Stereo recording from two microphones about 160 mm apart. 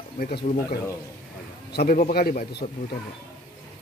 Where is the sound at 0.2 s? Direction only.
70° left (ahead or behind).